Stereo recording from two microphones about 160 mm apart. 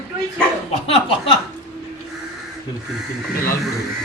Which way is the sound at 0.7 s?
35° left (ahead or behind).